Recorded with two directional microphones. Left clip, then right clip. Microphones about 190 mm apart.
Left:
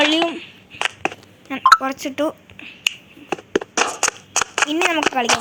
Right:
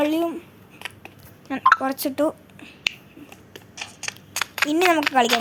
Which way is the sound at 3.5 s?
45° left (ahead or behind).